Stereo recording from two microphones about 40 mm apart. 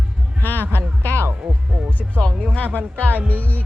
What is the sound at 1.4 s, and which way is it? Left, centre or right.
Speech, right.